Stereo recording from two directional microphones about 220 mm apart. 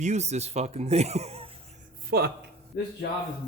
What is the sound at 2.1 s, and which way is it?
Speech, 45° right (ahead or behind).